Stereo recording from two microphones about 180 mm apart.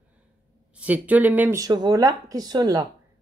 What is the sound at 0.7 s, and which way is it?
Speech, 10° right (ahead or behind).